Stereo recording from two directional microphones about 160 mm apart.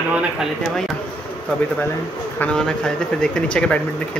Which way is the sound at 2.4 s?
5° left (ahead or behind).